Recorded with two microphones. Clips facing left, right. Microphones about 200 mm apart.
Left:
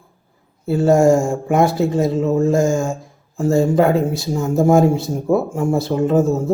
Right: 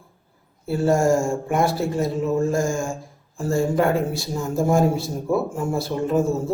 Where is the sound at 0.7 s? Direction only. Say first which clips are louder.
Left 6 dB; 20° left (ahead or behind).